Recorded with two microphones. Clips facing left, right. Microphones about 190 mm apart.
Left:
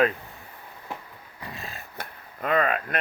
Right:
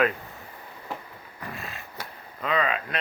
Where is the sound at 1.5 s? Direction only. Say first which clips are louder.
Even; 30° left (ahead or behind).